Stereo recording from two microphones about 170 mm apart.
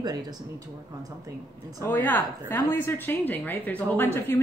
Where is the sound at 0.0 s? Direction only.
25° right (ahead or behind).